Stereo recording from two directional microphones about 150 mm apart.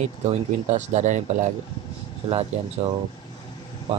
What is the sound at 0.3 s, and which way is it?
Speech, 50° right (ahead or behind).